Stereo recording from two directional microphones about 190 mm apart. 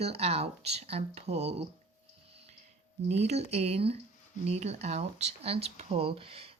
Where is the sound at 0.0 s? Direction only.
35° right (ahead or behind).